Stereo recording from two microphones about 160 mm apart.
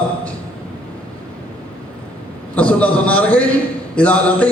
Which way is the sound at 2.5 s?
10° left (ahead or behind).